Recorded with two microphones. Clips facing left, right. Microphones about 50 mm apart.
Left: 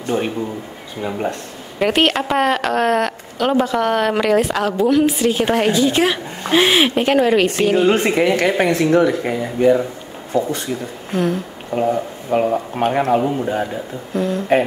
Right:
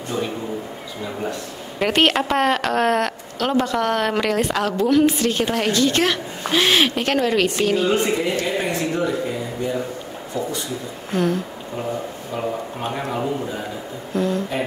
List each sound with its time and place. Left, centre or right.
0.1 s speech: left
1.8 s speech: centre
7.9 s speech: left
11.1 s speech: centre
11.7 s speech: left
14.1 s speech: centre